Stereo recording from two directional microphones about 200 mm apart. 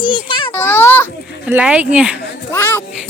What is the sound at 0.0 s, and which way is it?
Speech, 25° left (ahead or behind).